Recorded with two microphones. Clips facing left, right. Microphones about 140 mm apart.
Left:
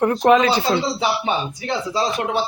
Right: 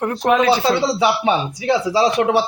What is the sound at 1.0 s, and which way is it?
Speech, 80° right.